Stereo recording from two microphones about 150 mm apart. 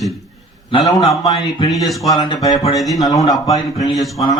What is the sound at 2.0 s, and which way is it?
Speech, 25° left (ahead or behind).